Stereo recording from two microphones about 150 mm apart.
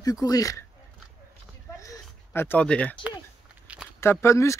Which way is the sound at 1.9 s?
15° left (ahead or behind).